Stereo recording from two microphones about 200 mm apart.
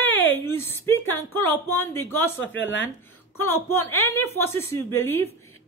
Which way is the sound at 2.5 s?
65° left (ahead or behind).